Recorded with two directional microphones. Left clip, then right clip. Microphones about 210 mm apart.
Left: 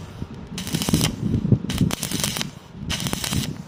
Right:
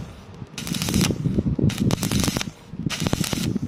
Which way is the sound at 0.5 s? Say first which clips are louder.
Left 1 dB; 10° right (ahead or behind).